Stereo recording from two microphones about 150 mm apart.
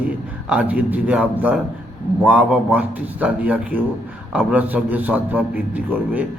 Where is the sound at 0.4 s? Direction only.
10° right (ahead or behind).